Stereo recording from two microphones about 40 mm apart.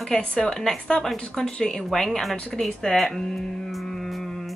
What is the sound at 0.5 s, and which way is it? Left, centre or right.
Speech, centre.